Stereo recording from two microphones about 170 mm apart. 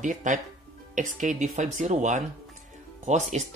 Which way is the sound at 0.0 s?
45° right (ahead or behind).